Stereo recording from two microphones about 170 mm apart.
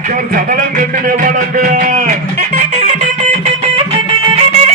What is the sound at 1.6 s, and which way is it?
Speech, 50° right (ahead or behind).